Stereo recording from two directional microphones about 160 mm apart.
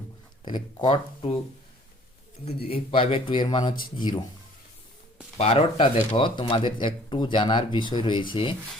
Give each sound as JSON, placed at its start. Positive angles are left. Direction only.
{"t": 0.4, "sound": "speech", "side_deg": 30}
{"t": 2.6, "sound": "speech", "side_deg": 35}
{"t": 5.4, "sound": "speech", "side_deg": 40}